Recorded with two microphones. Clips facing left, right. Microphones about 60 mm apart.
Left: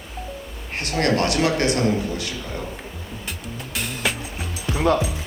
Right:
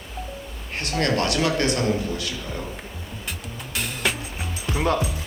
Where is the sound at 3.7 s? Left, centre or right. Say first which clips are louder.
Even; centre.